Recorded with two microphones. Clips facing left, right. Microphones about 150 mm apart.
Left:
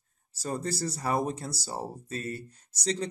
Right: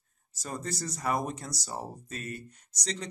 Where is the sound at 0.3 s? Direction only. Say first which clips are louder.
Left 4 dB; 30° left (ahead or behind).